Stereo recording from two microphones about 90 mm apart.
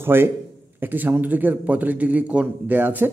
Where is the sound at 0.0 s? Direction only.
25° right (ahead or behind).